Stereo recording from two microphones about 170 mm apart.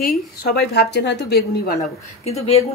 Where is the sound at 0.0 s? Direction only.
65° left (ahead or behind).